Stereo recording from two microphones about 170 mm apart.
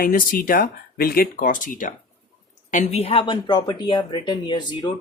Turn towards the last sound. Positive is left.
turn(degrees=25)  # may be behind; listen again after turning